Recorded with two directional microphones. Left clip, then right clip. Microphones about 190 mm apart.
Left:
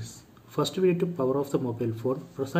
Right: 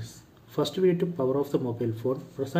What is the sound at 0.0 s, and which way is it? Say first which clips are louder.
Speech: left 1 dB; centre (ahead or behind).